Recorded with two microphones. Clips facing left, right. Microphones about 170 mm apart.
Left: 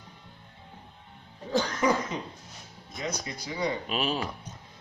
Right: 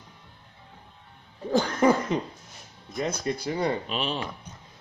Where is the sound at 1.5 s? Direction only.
55° right (ahead or behind).